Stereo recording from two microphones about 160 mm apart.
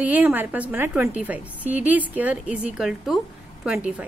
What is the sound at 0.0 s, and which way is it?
A woman's voice, 10° right (ahead or behind).